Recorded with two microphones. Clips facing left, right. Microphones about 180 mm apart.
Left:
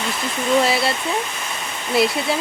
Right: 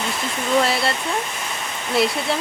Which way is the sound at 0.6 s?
Centre (ahead or behind).